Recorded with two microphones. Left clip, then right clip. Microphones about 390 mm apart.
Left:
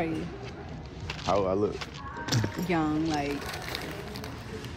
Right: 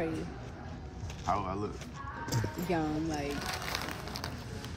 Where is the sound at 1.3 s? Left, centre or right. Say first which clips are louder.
Left 7 dB; left.